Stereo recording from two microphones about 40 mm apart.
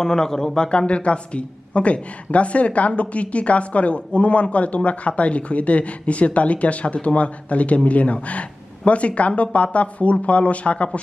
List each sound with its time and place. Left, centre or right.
0.0 s a man's voice: centre
0.7 s speech: left